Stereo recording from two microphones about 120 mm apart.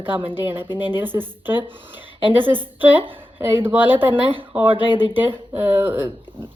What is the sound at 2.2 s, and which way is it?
Speech, 45° right (ahead or behind).